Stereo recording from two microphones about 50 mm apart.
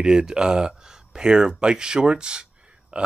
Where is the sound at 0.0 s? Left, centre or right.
Centre.